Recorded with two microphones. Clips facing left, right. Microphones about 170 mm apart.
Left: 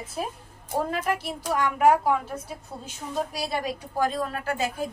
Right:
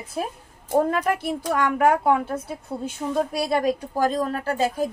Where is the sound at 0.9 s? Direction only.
55° right (ahead or behind); by 4.7 s 35° right (ahead or behind).